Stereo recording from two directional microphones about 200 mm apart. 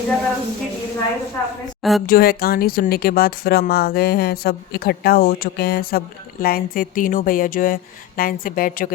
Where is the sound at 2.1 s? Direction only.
50° left (ahead or behind).